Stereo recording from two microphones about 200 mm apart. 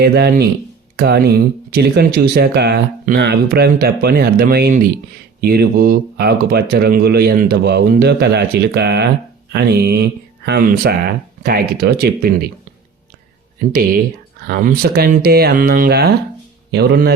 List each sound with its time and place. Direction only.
0.0 s speech: 50° right (ahead or behind)
14.4 s a man's voice: 50° right (ahead or behind)